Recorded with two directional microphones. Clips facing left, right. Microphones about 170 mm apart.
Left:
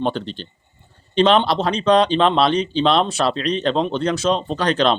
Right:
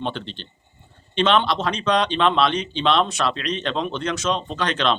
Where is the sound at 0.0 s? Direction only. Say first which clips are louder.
Left 6 dB; 40° left (ahead or behind).